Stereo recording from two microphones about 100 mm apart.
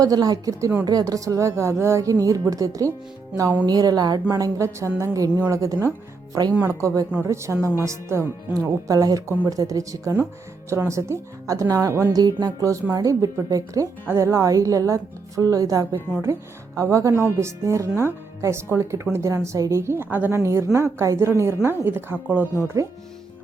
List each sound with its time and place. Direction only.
0.0 s speech: 40° right (ahead or behind); by 22.4 s 20° right (ahead or behind)
22.6 s speech: 30° right (ahead or behind)